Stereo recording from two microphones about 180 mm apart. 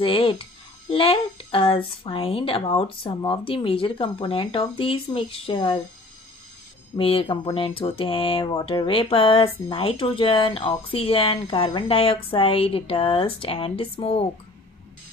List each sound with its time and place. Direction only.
0.0 s speech: 30° left (ahead or behind)
7.0 s speech: 30° left (ahead or behind)